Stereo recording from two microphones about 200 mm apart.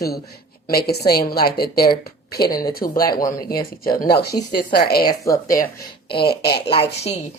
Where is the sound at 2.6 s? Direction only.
45° left (ahead or behind).